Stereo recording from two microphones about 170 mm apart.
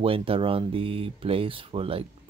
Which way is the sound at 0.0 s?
35° right (ahead or behind).